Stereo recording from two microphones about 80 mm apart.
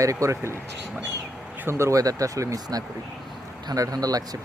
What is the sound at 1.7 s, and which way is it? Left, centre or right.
Speech, right.